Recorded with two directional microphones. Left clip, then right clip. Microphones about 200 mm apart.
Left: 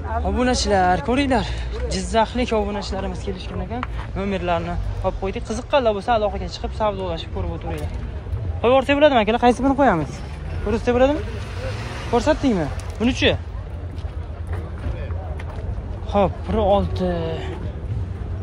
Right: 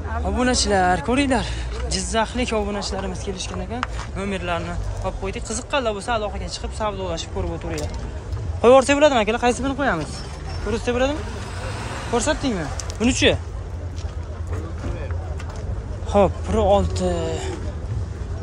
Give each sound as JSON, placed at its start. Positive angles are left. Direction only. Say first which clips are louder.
{"t": 0.2, "sound": "speech", "louder": "even", "side_deg": -15}
{"t": 9.1, "sound": "speech", "louder": "left 3 dB", "side_deg": -10}
{"t": 9.6, "sound": "speech", "louder": "left 5 dB", "side_deg": 5}
{"t": 11.7, "sound": "vehicle", "louder": "right 1 dB", "side_deg": -50}
{"t": 12.1, "sound": "speech", "louder": "left 3 dB", "side_deg": -5}
{"t": 13.0, "sound": "speech", "louder": "right 1 dB", "side_deg": -15}
{"t": 16.1, "sound": "speech", "louder": "right 2 dB", "side_deg": -20}